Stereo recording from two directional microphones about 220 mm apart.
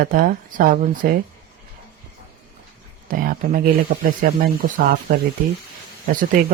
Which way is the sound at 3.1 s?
40° right (ahead or behind).